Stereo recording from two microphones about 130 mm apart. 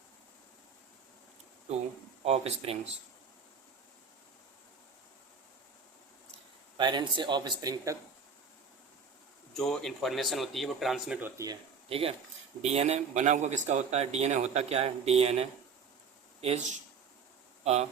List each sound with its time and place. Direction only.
2.2 s speech: 50° right (ahead or behind)
6.7 s speech: 35° right (ahead or behind)
9.6 s speech: 5° left (ahead or behind)
11.2 s speech: 25° right (ahead or behind)
11.9 s a man's voice: 45° right (ahead or behind)